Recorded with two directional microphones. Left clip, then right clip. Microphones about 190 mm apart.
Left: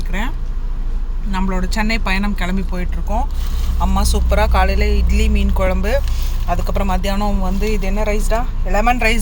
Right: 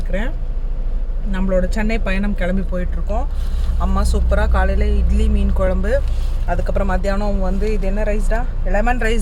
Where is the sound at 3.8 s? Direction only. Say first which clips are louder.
Left 3 dB; 25° right (ahead or behind).